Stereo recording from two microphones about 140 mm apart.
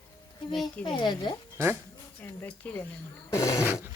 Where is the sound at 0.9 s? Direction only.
35° left (ahead or behind).